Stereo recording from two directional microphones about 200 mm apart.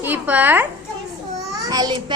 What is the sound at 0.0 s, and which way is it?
A child's voice, 10° right (ahead or behind).